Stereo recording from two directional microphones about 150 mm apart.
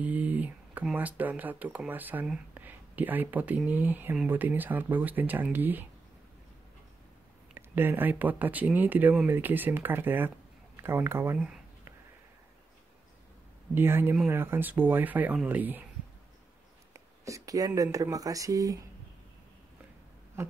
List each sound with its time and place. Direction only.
0.0 s speech: 10° right (ahead or behind)
7.5 s speech: 15° right (ahead or behind)
13.7 s speech: 15° right (ahead or behind)
16.9 s a sound: 20° right (ahead or behind)
17.9 s speech: 25° right (ahead or behind)
20.4 s a sound: 15° right (ahead or behind)